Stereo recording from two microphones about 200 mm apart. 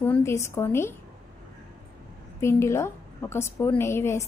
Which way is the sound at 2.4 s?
15° left (ahead or behind).